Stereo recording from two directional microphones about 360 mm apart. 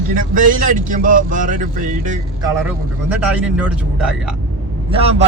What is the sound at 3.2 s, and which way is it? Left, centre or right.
Speech, centre.